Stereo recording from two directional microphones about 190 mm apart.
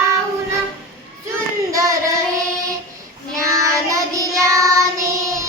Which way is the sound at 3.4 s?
15° right (ahead or behind).